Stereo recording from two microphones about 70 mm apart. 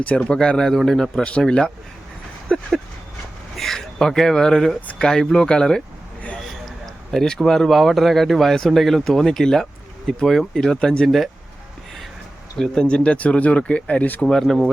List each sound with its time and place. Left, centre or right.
0.0 s a man's voice: centre
12.5 s speech: centre
14.3 s speech: centre